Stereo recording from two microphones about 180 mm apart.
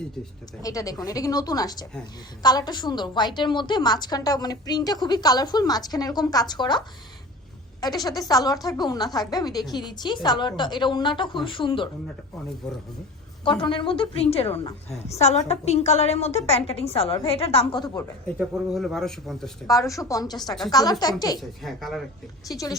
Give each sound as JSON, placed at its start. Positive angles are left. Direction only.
{"t": 0.6, "sound": "a woman's voice", "side_deg": 20}
{"t": 12.6, "sound": "speech", "side_deg": 5}
{"t": 13.4, "sound": "a woman's voice", "side_deg": 30}
{"t": 18.3, "sound": "speech", "side_deg": 0}
{"t": 19.9, "sound": "a woman's voice", "side_deg": 20}
{"t": 21.6, "sound": "speech", "side_deg": 0}
{"t": 22.5, "sound": "a woman's voice", "side_deg": 20}